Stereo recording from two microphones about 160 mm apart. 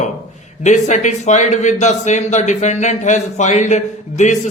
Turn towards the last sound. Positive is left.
turn(degrees=45)  # may be behind; listen again after turning